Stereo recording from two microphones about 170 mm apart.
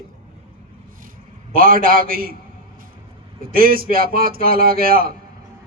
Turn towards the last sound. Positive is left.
turn(degrees=-60)  # may be behind; listen again after turning